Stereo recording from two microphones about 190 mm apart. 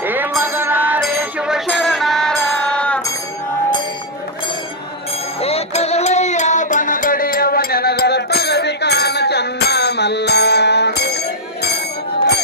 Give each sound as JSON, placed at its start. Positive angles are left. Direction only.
{"t": 0.0, "sound": "music", "side_deg": -10}
{"t": 5.4, "sound": "music", "side_deg": 30}